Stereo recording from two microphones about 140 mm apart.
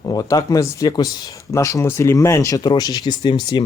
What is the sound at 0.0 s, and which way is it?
Speech, 25° left (ahead or behind).